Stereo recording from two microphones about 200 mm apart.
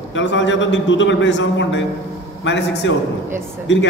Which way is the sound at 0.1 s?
65° left (ahead or behind).